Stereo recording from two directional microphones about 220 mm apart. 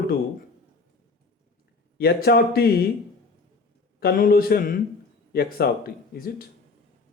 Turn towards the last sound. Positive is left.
turn(degrees=40)  # may be behind; listen again after turning